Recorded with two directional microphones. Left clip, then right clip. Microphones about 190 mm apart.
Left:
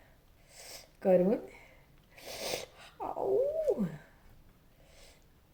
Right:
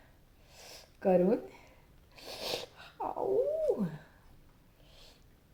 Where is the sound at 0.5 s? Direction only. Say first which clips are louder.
Left 2 dB; 10° left (ahead or behind).